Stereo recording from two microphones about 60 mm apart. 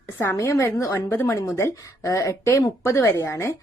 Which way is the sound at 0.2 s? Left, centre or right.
Left.